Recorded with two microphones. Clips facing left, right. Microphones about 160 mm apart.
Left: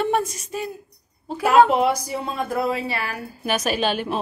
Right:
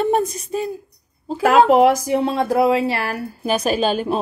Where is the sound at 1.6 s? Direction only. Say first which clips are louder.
Right 6 dB; 90° right.